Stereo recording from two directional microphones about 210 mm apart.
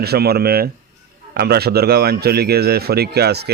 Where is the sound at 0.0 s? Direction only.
50° right (ahead or behind).